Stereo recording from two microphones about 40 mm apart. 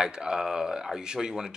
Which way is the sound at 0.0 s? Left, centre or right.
Centre.